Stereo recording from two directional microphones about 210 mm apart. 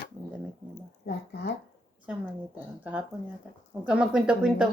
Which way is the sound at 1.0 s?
50° left (ahead or behind).